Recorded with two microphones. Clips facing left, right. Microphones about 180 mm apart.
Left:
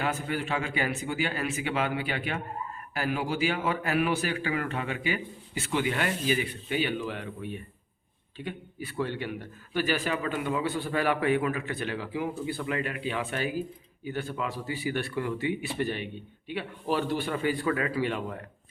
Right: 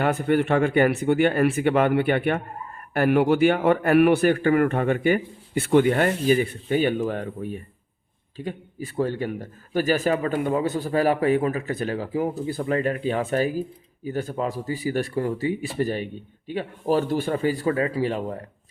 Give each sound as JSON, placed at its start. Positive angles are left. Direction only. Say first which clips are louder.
{"t": 0.0, "sound": "a man's voice", "louder": "right 10 dB", "side_deg": -60}